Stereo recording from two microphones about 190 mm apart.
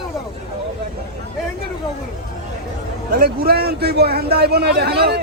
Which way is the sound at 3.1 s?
50° right (ahead or behind).